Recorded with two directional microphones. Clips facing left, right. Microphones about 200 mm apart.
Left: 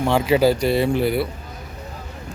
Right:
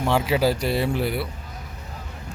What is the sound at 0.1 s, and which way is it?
Speech, centre (ahead or behind).